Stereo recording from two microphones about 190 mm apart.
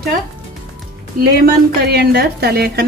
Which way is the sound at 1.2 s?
55° right (ahead or behind).